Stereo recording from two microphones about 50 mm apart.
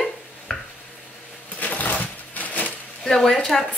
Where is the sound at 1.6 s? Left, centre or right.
Left.